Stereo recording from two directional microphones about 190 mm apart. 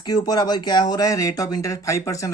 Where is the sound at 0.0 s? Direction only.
20° left (ahead or behind).